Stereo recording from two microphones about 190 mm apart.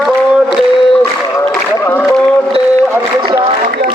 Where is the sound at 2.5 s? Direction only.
30° right (ahead or behind).